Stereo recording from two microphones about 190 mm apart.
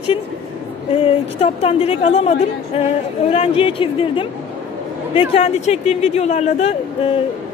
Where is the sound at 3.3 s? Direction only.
30° left (ahead or behind).